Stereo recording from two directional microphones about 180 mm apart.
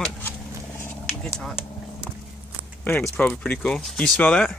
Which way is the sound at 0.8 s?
15° left (ahead or behind).